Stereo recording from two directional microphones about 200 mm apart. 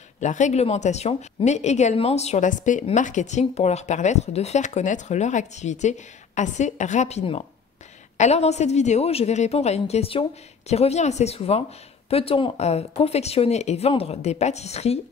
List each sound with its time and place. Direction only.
0.2 s a woman's voice: 35° left (ahead or behind)